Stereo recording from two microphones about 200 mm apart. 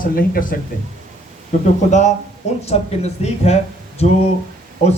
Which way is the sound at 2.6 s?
30° left (ahead or behind).